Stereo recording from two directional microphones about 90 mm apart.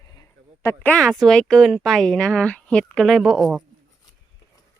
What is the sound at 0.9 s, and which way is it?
Speech, 5° left (ahead or behind).